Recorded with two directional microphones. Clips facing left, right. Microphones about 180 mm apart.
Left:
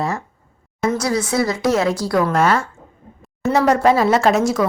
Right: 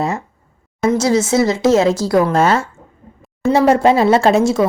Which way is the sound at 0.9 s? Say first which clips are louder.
Right 6 dB; 25° right (ahead or behind).